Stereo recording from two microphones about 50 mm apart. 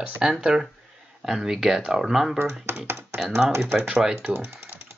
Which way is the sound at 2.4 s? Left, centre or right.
Right.